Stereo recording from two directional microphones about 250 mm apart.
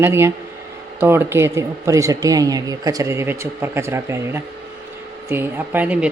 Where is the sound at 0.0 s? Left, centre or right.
Centre.